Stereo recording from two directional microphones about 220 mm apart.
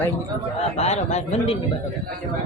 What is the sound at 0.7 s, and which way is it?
Speech, 30° left (ahead or behind).